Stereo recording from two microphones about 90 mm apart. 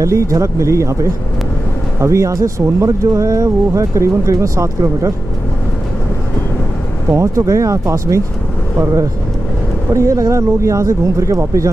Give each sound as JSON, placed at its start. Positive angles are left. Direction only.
{"t": 0.0, "sound": "speech", "side_deg": -35}
{"t": 7.1, "sound": "speech", "side_deg": -35}
{"t": 9.9, "sound": "speech", "side_deg": -35}